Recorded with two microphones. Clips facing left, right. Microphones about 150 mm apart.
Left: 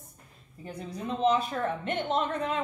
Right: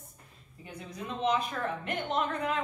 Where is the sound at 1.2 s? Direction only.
30° left (ahead or behind).